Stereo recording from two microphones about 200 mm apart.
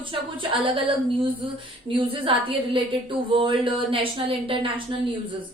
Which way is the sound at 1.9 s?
25° right (ahead or behind).